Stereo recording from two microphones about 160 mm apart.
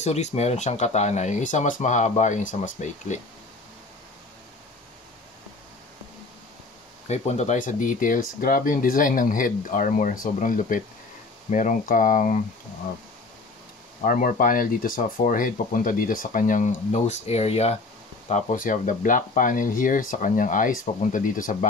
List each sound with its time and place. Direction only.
0.0 s speech: 45° left (ahead or behind)
7.1 s speech: 45° left (ahead or behind)
14.0 s speech: 60° left (ahead or behind); by 17.7 s 40° left (ahead or behind)
18.3 s speech: 55° left (ahead or behind)